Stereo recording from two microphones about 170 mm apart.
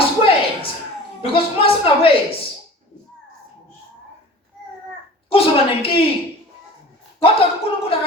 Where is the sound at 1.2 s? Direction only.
30° left (ahead or behind).